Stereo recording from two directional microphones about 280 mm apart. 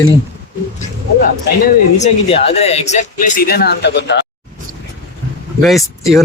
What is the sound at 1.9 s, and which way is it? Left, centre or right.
Speech, left.